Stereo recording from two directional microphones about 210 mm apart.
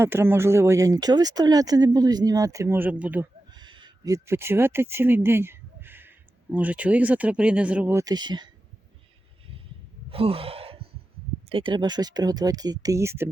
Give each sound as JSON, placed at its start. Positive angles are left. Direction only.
{"t": 0.0, "sound": "speech", "side_deg": -10}
{"t": 3.5, "sound": "speech", "side_deg": -20}
{"t": 10.1, "sound": "sigh", "side_deg": -25}
{"t": 11.4, "sound": "speech", "side_deg": -25}